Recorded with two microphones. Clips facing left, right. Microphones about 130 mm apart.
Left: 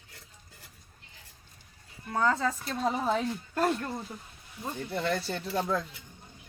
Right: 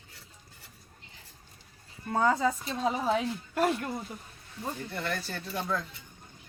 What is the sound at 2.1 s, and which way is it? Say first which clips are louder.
Speech: right 2 dB; 15° right (ahead or behind).